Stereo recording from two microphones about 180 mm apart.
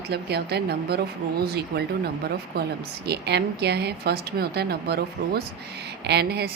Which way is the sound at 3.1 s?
65° right (ahead or behind).